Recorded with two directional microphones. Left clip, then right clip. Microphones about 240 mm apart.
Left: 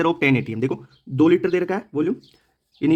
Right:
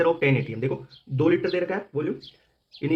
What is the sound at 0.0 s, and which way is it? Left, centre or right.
Speech, left.